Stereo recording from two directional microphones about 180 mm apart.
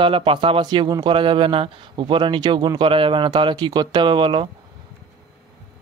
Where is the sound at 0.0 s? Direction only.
30° right (ahead or behind).